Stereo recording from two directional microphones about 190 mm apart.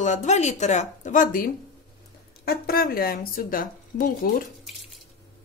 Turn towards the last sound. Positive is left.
turn(degrees=50)  # may be behind; listen again after turning